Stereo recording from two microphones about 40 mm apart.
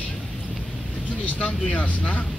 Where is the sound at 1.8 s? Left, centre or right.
Left.